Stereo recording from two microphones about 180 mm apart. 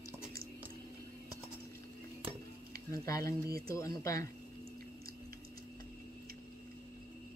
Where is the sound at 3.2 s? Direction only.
55° right (ahead or behind).